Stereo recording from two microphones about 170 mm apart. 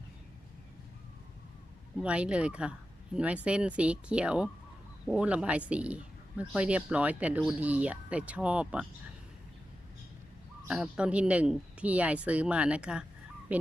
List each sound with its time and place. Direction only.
2.0 s speech: 5° right (ahead or behind)
10.7 s speech: 5° right (ahead or behind)